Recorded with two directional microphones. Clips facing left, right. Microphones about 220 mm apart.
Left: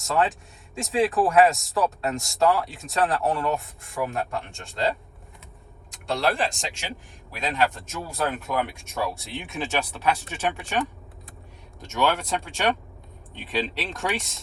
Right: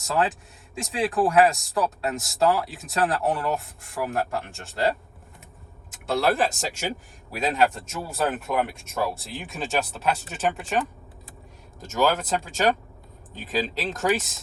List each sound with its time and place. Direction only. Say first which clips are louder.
0.0 s speech: left 1 dB; centre (ahead or behind)
6.7 s speech: right 6 dB; 45° right (ahead or behind)
7.3 s speech: right 3 dB; centre (ahead or behind)